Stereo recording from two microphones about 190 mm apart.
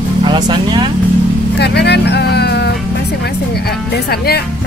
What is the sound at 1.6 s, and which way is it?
Speech, 60° left (ahead or behind).